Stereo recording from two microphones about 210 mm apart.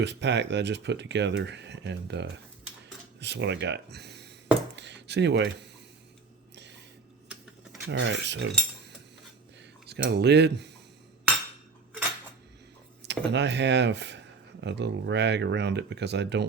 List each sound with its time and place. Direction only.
0.0 s speech: 55° right (ahead or behind)
4.7 s a sound: 55° right (ahead or behind)
6.6 s a sound: 55° right (ahead or behind)
7.9 s speech: 55° right (ahead or behind)
9.8 s speech: 50° right (ahead or behind)
13.1 s speech: 55° right (ahead or behind)